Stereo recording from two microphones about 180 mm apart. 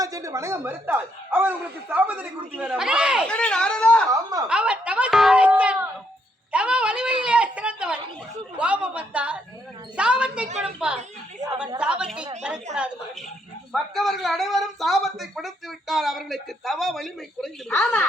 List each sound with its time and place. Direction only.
0.0 s speech: 20° right (ahead or behind)
3.2 s speech: 5° left (ahead or behind)
4.1 s a woman's voice: 20° right (ahead or behind)
4.4 s speech: 5° right (ahead or behind)
6.5 s a sound: 5° right (ahead or behind)
8.5 s speech: 5° right (ahead or behind)
13.7 s speech: centre (ahead or behind)